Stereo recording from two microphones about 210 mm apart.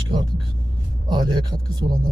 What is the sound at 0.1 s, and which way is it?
Vehicle, 20° right (ahead or behind).